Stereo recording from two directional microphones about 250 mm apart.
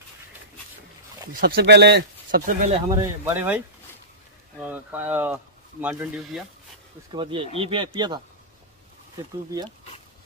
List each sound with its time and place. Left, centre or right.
1.3 s speech: right
2.9 s speech: centre
7.1 s speech: centre